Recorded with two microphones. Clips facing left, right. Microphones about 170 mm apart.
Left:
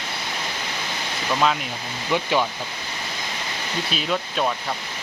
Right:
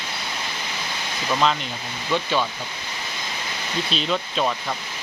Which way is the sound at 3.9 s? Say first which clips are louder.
Right 1 dB; 5° left (ahead or behind).